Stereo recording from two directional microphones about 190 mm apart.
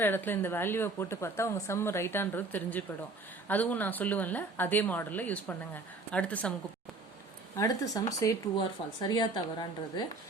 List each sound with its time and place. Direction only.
0.0 s a woman's voice: 10° left (ahead or behind)
7.5 s a woman's voice: 15° left (ahead or behind)